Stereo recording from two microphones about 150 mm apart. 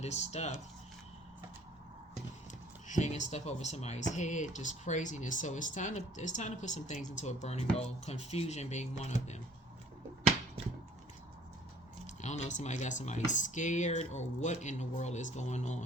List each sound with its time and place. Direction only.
0.0 s speech: 50° left (ahead or behind)
2.8 s speech: 55° left (ahead or behind)
12.0 s speech: 50° left (ahead or behind)